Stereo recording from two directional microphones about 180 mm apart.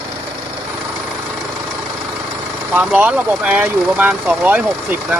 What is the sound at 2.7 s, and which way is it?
Speech, 10° right (ahead or behind).